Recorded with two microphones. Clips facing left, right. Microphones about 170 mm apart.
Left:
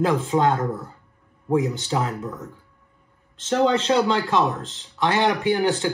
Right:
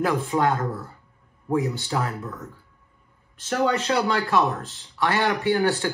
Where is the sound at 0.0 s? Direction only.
20° left (ahead or behind).